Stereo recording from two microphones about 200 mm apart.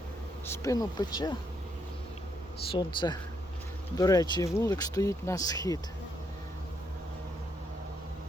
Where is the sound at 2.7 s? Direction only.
25° left (ahead or behind).